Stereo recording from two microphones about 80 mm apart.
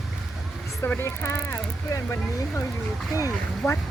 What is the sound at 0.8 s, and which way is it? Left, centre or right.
Speech, left.